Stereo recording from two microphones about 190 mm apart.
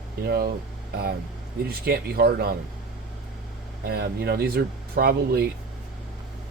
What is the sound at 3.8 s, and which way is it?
Speech, 55° right (ahead or behind).